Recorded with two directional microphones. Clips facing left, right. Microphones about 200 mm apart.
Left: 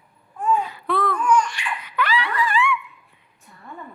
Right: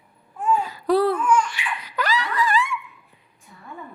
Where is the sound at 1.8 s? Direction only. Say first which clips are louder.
Left 1 dB; 40° right (ahead or behind).